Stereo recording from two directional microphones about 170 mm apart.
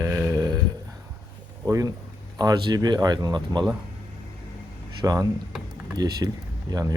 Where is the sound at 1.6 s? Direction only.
20° right (ahead or behind).